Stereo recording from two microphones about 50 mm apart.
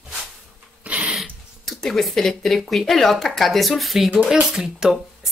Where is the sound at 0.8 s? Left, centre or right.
Right.